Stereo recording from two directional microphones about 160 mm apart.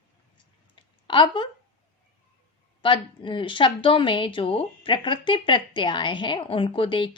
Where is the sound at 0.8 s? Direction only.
30° left (ahead or behind).